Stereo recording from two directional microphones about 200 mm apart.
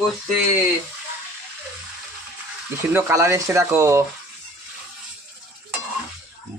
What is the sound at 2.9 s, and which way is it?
Speech, 10° right (ahead or behind).